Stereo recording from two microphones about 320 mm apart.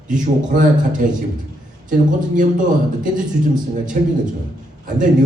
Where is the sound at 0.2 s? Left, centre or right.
Right.